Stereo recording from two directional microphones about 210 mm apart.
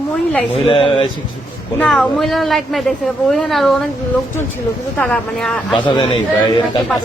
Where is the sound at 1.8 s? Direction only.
5° left (ahead or behind).